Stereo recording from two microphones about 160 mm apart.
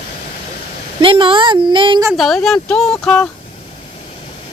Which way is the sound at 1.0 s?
30° right (ahead or behind).